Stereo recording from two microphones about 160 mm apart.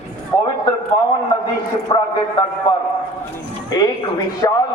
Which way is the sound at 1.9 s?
35° left (ahead or behind).